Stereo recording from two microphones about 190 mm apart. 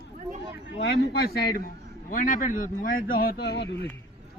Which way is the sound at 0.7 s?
55° left (ahead or behind).